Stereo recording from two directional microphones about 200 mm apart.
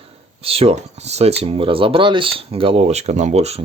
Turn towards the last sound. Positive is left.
turn(degrees=-35)  # may be behind; listen again after turning